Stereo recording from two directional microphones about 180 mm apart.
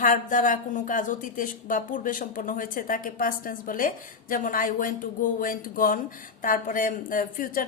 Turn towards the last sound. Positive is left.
turn(degrees=50)  # may be behind; listen again after turning